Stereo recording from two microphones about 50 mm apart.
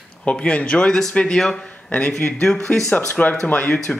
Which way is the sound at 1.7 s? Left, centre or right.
Left.